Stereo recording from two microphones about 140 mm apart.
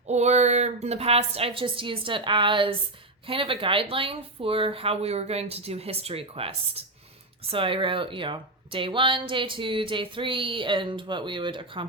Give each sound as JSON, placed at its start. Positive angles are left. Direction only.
{"t": 0.1, "sound": "a woman's voice", "side_deg": -55}